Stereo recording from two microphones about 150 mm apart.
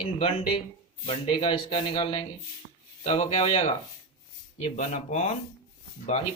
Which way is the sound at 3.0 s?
45° left (ahead or behind).